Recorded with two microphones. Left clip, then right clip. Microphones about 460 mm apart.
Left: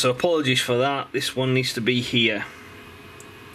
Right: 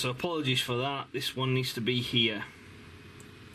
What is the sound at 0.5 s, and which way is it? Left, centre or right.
Speech, centre.